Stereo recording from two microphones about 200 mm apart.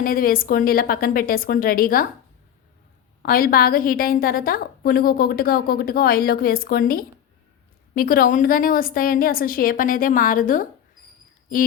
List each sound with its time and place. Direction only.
0.0 s a woman's voice: 45° left (ahead or behind)
3.2 s a woman's voice: 45° left (ahead or behind)